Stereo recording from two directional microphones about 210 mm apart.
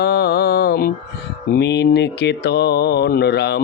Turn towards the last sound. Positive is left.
turn(degrees=50)  # may be behind; listen again after turning